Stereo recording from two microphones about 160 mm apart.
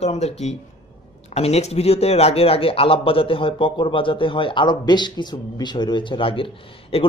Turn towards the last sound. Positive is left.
turn(degrees=35)  # may be behind; listen again after turning